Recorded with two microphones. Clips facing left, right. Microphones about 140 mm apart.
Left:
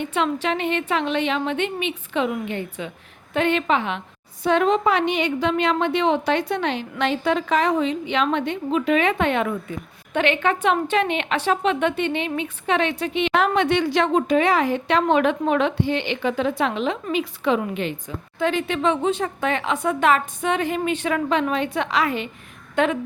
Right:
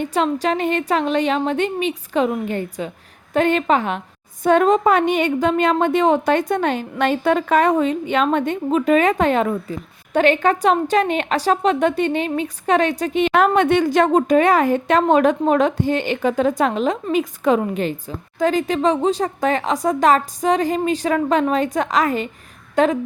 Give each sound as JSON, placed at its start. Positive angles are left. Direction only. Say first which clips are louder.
{"t": 0.0, "sound": "a woman's voice", "louder": "right 4 dB", "side_deg": -40}